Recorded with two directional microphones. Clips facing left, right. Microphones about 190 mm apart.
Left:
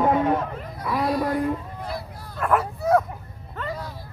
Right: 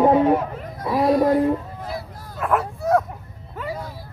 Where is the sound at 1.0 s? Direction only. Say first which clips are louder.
Right 7 dB; 45° right (ahead or behind).